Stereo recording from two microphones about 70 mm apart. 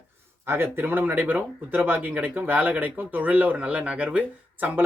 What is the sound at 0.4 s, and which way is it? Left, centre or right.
Speech, right.